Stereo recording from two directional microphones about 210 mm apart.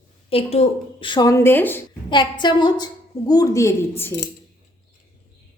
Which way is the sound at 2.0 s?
20° left (ahead or behind).